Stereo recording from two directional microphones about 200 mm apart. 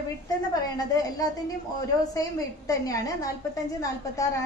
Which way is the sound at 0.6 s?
20° left (ahead or behind).